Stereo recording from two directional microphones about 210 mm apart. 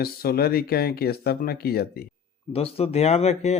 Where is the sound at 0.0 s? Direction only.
45° left (ahead or behind).